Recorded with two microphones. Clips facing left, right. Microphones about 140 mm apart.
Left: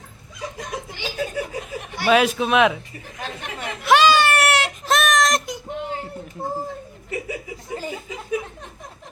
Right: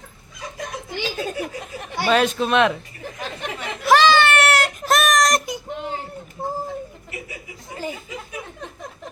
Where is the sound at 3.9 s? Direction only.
5° left (ahead or behind).